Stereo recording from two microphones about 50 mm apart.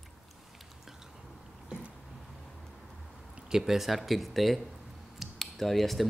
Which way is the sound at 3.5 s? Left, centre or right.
Centre.